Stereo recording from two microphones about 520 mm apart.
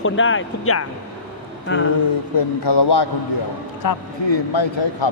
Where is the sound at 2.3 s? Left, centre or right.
Left.